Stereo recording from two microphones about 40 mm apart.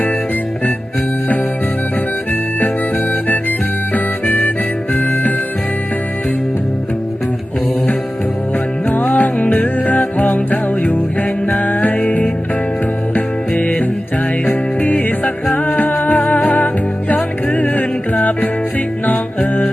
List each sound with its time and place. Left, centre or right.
3.9 s harmonica: left
8.9 s music: left
13.6 s music: left